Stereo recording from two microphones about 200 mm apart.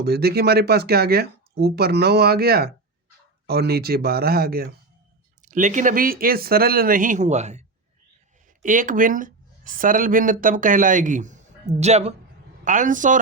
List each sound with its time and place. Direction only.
0.0 s speech: 50° right (ahead or behind)
5.5 s speech: 40° right (ahead or behind)
8.6 s speech: 40° right (ahead or behind)